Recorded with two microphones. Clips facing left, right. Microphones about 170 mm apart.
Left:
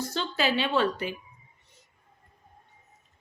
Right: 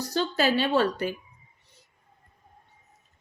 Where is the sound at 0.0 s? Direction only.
40° right (ahead or behind).